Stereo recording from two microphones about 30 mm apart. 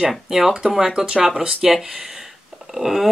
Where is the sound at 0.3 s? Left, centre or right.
Centre.